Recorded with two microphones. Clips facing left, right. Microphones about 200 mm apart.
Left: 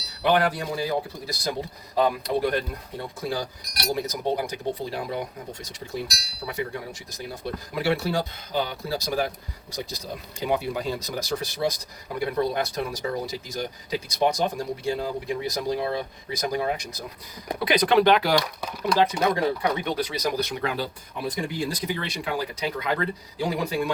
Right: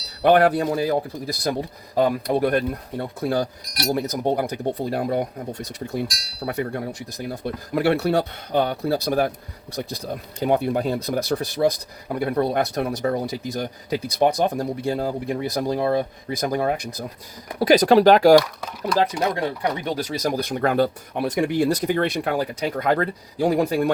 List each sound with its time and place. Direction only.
0.2 s speech: 50° right (ahead or behind)
17.6 s speech: 40° right (ahead or behind)
19.8 s speech: 40° right (ahead or behind)